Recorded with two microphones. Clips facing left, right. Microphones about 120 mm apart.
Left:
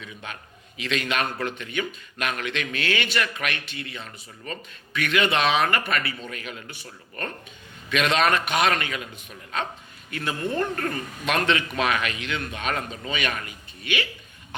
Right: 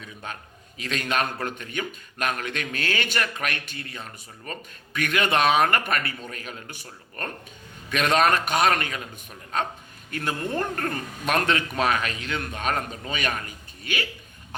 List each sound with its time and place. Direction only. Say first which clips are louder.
0.0 s a man's voice: right 1 dB; 40° right (ahead or behind)
10.1 s a man's voice: even; 45° right (ahead or behind)